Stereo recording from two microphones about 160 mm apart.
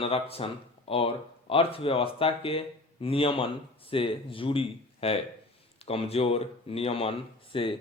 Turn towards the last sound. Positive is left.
turn(degrees=35)  # may be behind; listen again after turning